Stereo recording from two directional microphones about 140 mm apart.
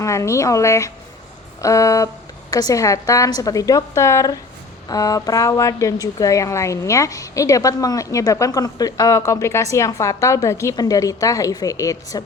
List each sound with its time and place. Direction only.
0.0 s a woman's voice: 20° left (ahead or behind)